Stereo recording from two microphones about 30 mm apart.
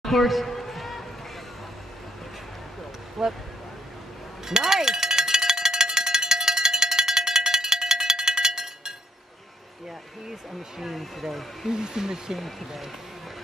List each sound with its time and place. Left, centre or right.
0.0 s a sound: centre
3.2 s speech: centre
4.5 s cowbell: centre
10.8 s speech: centre
11.7 s speech: right
12.4 s speech: centre